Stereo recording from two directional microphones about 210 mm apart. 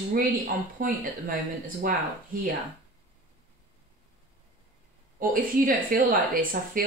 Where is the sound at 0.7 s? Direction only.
40° right (ahead or behind).